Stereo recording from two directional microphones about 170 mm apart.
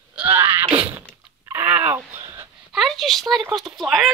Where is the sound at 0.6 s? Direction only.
30° right (ahead or behind).